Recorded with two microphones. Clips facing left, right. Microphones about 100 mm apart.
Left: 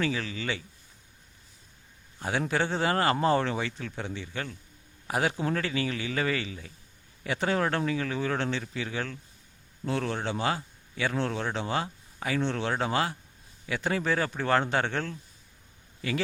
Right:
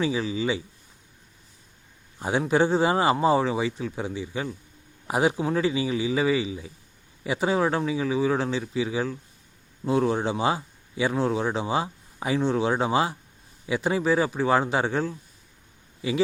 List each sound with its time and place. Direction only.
0.0 s speech: 15° right (ahead or behind)
2.1 s a man's voice: 20° right (ahead or behind)
5.4 s speech: 5° right (ahead or behind)